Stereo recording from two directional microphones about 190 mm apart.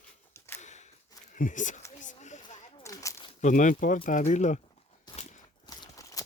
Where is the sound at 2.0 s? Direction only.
40° left (ahead or behind).